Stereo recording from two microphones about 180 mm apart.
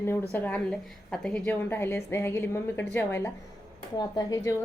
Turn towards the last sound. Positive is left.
turn(degrees=20)  # may be behind; listen again after turning